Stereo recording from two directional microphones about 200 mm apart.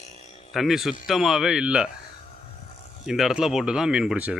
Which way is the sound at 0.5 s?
Centre (ahead or behind).